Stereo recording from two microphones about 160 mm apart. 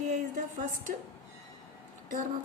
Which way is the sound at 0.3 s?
55° right (ahead or behind).